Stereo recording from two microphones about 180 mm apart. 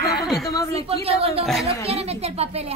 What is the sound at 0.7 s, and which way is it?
Speech, 35° right (ahead or behind).